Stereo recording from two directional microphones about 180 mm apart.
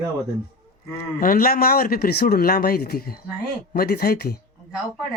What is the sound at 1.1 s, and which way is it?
Speech, 50° left (ahead or behind).